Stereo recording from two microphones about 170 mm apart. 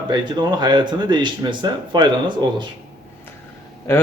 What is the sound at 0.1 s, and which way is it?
Speech, 25° right (ahead or behind).